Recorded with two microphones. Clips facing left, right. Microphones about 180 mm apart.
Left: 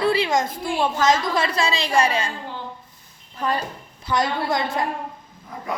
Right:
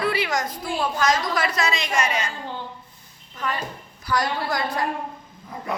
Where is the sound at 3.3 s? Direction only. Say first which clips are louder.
Left 4 dB; 35° left (ahead or behind).